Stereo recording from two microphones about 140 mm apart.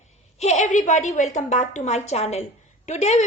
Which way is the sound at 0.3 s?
55° left (ahead or behind).